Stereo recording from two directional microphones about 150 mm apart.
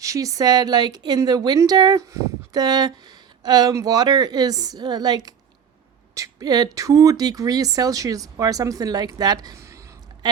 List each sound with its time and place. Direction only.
0.0 s speech: 20° right (ahead or behind)